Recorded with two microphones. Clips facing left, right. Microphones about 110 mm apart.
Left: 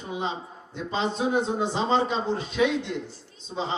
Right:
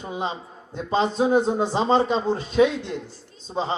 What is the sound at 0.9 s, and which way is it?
A man's voice, 40° right (ahead or behind).